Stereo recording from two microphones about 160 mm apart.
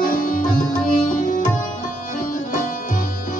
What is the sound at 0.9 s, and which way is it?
Sitar, 50° left (ahead or behind).